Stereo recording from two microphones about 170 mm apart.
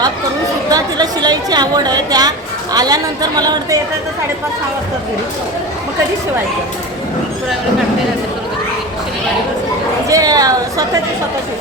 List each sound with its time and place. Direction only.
0.7 s a sound: 25° right (ahead or behind)
2.7 s a woman's voice: 25° right (ahead or behind)
10.1 s a woman's voice: 20° right (ahead or behind)